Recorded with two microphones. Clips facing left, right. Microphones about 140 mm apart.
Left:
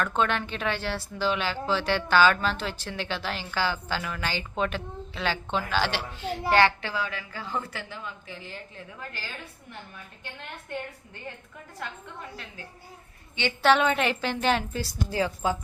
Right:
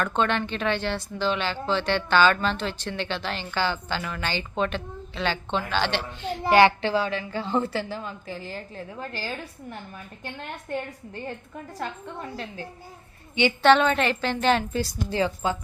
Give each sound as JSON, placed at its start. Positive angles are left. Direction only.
{"t": 0.0, "sound": "speech", "side_deg": 5}
{"t": 6.5, "sound": "a woman's voice", "side_deg": -15}
{"t": 6.8, "sound": "a woman's voice", "side_deg": -30}
{"t": 13.6, "sound": "a woman's voice", "side_deg": 5}